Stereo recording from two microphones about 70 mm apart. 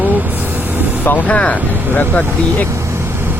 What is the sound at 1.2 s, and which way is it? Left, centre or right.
Speech, centre.